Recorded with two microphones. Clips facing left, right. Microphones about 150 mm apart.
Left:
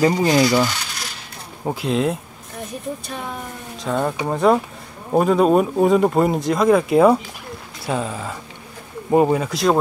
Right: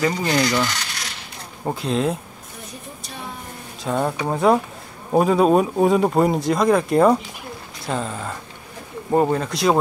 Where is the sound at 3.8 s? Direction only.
5° right (ahead or behind).